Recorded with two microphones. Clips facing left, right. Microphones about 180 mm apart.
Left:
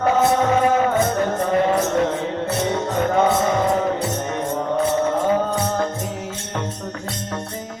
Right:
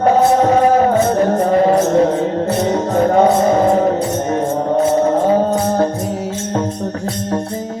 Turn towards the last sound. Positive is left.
turn(degrees=-35)  # may be behind; listen again after turning